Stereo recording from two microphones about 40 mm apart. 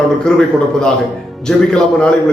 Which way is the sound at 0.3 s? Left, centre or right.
Centre.